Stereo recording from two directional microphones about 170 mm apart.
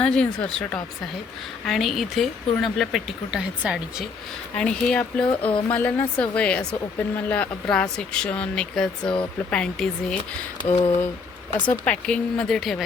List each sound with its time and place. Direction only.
0.0 s speech: 5° left (ahead or behind)
4.5 s speech: 5° left (ahead or behind)
5.5 s speech: 30° left (ahead or behind)
5.7 s speech: 10° left (ahead or behind)
10.7 s speech: 35° left (ahead or behind)
11.6 s speech: 5° left (ahead or behind)